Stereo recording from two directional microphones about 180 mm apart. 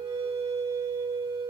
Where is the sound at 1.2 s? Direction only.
25° right (ahead or behind).